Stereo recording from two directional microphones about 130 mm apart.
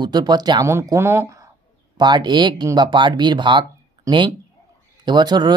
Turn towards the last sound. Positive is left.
turn(degrees=-35)  # may be behind; listen again after turning